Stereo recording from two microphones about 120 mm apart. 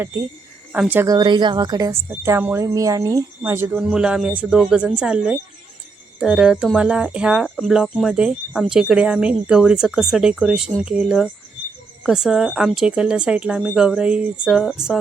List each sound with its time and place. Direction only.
0.7 s speech: 15° right (ahead or behind)
1.0 s speech: 35° right (ahead or behind)
1.9 s speech: 20° right (ahead or behind)
3.8 s speech: 5° right (ahead or behind)